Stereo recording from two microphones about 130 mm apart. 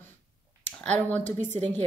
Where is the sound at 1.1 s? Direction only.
15° left (ahead or behind).